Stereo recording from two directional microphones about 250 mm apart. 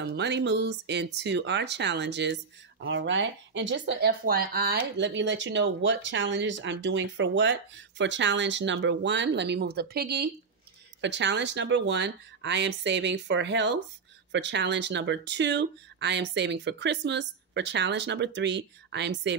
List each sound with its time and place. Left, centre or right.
0.0 s speech: right